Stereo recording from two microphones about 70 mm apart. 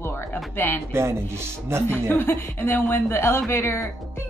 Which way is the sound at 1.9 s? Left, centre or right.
Left.